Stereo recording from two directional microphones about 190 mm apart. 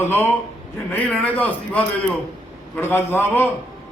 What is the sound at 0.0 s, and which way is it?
A man's voice, 10° left (ahead or behind).